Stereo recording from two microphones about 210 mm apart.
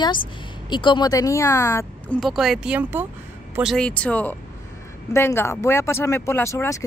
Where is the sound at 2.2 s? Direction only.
Centre (ahead or behind).